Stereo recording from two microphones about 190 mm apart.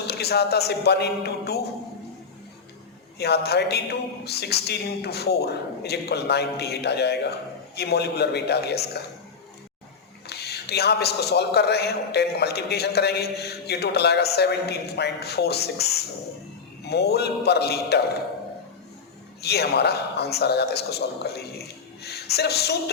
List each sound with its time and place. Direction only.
0.1 s a man's voice: 60° left (ahead or behind)
3.2 s a man's voice: 60° left (ahead or behind)
10.2 s a man's voice: 60° left (ahead or behind)
16.8 s a man's voice: 60° left (ahead or behind)
19.4 s a man's voice: 60° left (ahead or behind)